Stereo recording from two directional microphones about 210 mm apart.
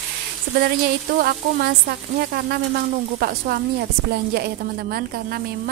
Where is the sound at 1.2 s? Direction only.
45° right (ahead or behind).